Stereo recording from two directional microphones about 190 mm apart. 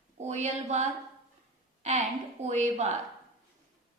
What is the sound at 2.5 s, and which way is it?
Speech, 35° right (ahead or behind).